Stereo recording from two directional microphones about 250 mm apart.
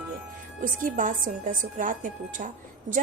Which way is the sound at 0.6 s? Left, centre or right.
Right.